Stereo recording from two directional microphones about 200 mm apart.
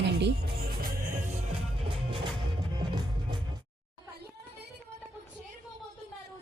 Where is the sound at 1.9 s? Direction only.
25° right (ahead or behind).